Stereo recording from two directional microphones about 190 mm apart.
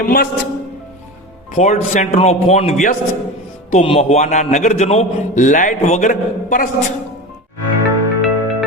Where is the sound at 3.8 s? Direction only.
30° left (ahead or behind).